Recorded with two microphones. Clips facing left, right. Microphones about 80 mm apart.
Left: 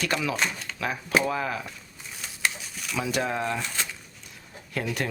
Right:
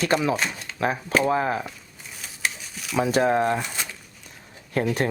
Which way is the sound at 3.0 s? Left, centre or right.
Right.